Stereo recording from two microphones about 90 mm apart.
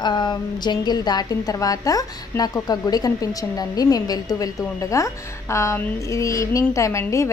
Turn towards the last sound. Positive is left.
turn(degrees=35)  # may be behind; listen again after turning